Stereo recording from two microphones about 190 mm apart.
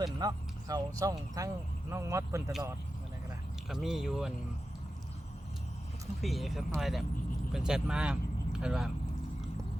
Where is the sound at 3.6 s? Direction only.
Centre (ahead or behind).